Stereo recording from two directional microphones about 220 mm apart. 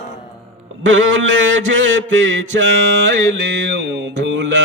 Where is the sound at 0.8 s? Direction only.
60° right (ahead or behind).